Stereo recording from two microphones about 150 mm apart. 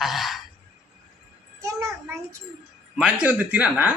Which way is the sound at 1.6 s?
20° right (ahead or behind).